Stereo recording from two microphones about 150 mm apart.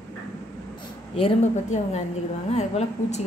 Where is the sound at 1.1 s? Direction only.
45° left (ahead or behind).